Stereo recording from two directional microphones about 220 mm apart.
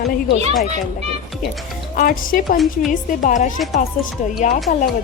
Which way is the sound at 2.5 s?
Centre (ahead or behind).